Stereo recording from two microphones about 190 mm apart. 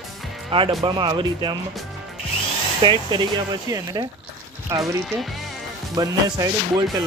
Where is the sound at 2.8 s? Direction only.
20° right (ahead or behind).